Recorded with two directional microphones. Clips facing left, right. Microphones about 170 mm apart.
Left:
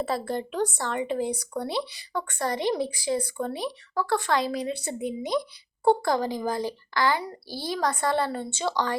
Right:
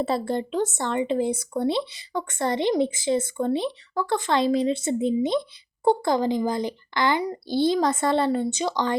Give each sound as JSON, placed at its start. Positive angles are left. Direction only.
{"t": 0.0, "sound": "speech", "side_deg": -25}